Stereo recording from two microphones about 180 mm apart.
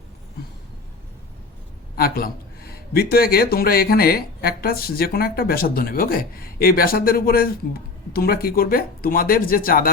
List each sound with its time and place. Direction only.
2.0 s a man's voice: 55° left (ahead or behind)